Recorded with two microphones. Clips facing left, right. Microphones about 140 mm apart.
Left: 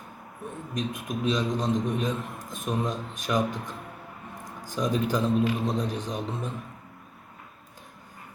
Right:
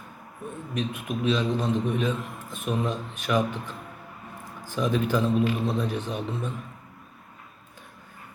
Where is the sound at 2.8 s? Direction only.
40° left (ahead or behind).